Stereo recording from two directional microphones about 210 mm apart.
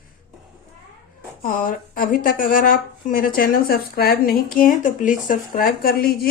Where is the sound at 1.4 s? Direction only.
40° left (ahead or behind).